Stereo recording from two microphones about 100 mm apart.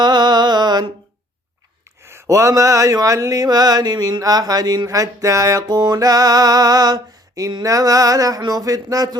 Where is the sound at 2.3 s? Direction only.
30° right (ahead or behind).